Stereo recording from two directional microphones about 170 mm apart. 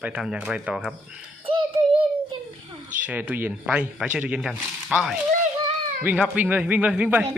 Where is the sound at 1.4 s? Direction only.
30° right (ahead or behind).